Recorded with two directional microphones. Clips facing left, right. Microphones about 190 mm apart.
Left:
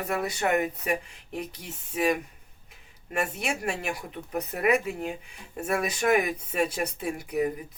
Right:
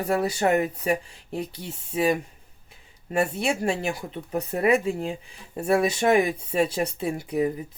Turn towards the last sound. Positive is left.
turn(degrees=-30)  # may be behind; listen again after turning